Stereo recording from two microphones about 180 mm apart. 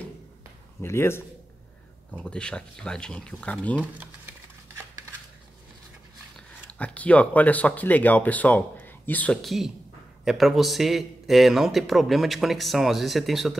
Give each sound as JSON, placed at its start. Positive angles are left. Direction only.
{"t": 0.8, "sound": "a man's voice", "side_deg": 15}
{"t": 6.7, "sound": "a man's voice", "side_deg": 10}